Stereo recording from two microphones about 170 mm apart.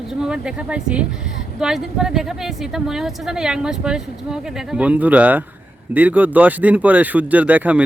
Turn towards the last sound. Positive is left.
turn(degrees=-10)  # may be behind; listen again after turning